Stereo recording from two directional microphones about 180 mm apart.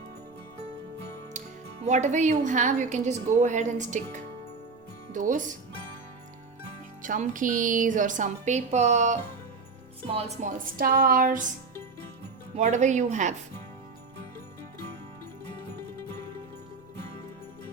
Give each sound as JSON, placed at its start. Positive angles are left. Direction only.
{"t": 1.8, "sound": "a woman's voice", "side_deg": -40}
{"t": 5.1, "sound": "speech", "side_deg": -45}
{"t": 7.0, "sound": "speech", "side_deg": -45}
{"t": 10.2, "sound": "a woman's voice", "side_deg": -40}
{"t": 10.8, "sound": "speech", "side_deg": -60}
{"t": 12.5, "sound": "a woman's voice", "side_deg": -40}